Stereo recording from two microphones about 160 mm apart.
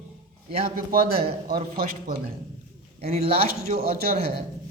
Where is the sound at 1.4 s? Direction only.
70° right (ahead or behind).